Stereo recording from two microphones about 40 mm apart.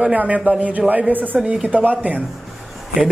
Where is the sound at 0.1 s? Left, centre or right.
Right.